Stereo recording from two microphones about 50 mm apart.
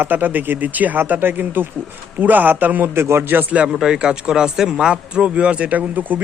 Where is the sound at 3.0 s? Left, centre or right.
Right.